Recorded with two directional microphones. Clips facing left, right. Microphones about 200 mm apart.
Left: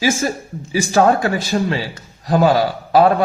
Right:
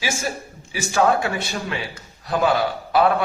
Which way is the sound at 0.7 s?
40° left (ahead or behind).